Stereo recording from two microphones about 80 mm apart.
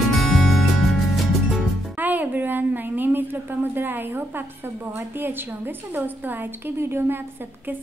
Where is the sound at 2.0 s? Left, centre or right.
Right.